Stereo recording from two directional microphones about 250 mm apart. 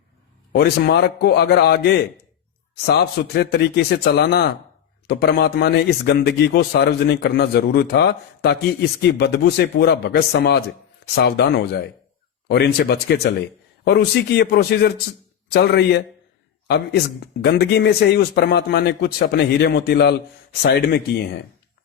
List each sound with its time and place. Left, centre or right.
0.5 s a man's voice: left